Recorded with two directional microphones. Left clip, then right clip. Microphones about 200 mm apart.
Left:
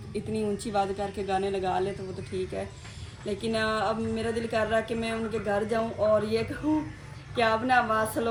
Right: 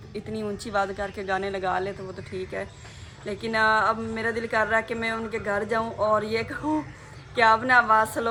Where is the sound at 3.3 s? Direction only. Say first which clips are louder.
Right 6 dB; 5° right (ahead or behind).